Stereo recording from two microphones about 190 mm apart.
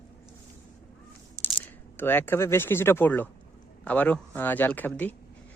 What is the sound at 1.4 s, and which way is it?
Typing, 15° right (ahead or behind).